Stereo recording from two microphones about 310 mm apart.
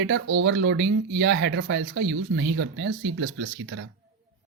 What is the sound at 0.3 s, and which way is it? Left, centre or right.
Speech, right.